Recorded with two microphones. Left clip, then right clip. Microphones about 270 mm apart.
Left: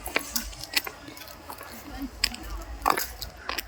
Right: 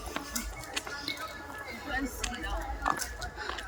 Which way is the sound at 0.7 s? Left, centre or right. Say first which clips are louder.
Left 9 dB; left.